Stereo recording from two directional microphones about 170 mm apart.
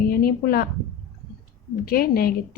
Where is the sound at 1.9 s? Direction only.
60° left (ahead or behind).